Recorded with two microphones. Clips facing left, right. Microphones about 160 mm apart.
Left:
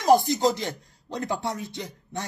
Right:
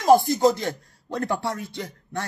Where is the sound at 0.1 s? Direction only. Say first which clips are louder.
Right 3 dB; 20° left (ahead or behind).